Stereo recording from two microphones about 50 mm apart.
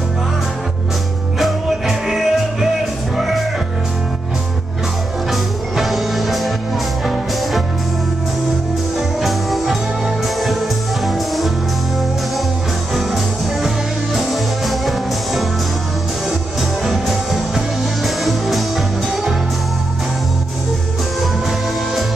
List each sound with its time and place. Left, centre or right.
1.4 s music: centre
5.3 s music: centre
9.5 s music: centre
12.9 s music: centre
16.8 s music: centre
21.2 s music: centre